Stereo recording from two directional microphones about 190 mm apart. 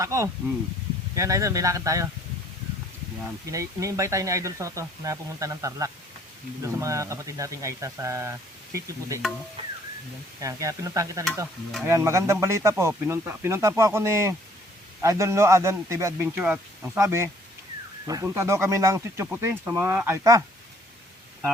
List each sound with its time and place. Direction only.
0.0 s speech: 15° right (ahead or behind)
3.4 s speech: 15° right (ahead or behind)
10.4 s speech: 15° right (ahead or behind)